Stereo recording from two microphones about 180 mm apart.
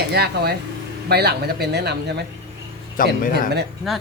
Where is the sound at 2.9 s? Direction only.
50° left (ahead or behind).